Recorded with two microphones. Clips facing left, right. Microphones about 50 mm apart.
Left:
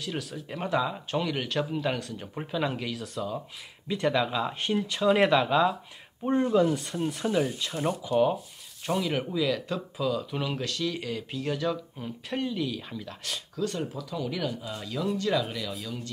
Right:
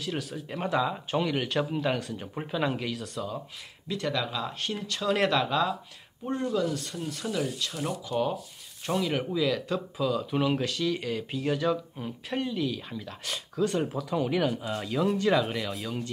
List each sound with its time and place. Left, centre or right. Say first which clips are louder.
0.0 s speech: right 1 dB; centre
3.8 s speech: left 4 dB; centre
6.2 s speech: left 5 dB; left
8.1 s speech: left 5 dB; centre
13.6 s speech: right 4 dB; right
13.9 s speech: right 5 dB; right